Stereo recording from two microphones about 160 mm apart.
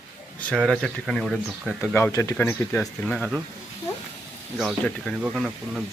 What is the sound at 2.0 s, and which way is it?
Speech, 15° left (ahead or behind).